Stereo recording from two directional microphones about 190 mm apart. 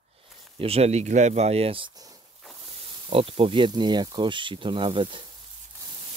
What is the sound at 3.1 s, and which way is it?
Speech, 30° right (ahead or behind).